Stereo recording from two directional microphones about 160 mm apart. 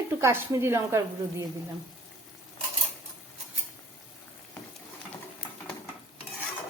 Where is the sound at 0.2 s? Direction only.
15° right (ahead or behind).